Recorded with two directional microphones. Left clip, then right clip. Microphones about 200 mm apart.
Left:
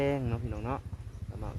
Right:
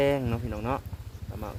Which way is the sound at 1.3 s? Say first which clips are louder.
Right 6 dB; 15° right (ahead or behind).